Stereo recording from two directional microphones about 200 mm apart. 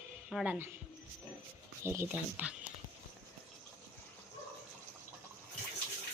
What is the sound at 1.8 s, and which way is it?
Speech, 10° right (ahead or behind).